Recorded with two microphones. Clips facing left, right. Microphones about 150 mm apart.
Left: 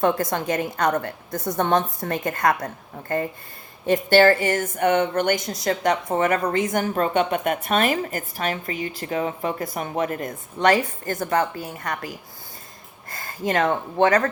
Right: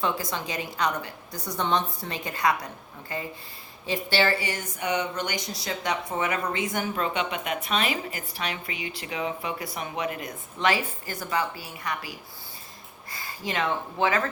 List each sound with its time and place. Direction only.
0.0 s a woman's voice: 50° left (ahead or behind)